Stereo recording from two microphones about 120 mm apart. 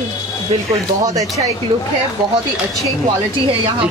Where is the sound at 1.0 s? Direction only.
30° right (ahead or behind).